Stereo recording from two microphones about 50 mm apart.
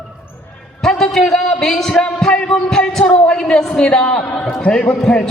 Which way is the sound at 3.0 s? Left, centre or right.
Left.